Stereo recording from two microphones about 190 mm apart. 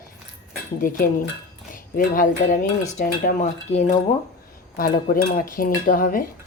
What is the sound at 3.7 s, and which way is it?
Speech, 35° left (ahead or behind).